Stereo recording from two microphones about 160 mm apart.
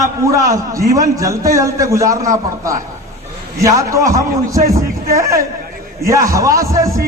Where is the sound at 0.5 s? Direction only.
20° right (ahead or behind).